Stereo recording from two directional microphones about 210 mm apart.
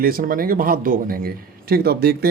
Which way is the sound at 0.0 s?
45° right (ahead or behind).